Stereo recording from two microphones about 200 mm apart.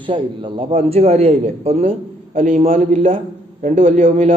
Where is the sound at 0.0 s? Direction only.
25° right (ahead or behind).